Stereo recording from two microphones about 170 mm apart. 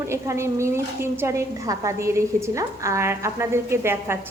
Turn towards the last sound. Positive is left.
turn(degrees=-15)  # may be behind; listen again after turning